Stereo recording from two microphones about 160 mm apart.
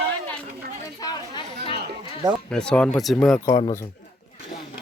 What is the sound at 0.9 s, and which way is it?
Chatter, 25° left (ahead or behind).